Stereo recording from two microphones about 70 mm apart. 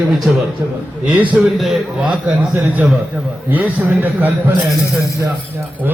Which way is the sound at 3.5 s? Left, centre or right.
Right.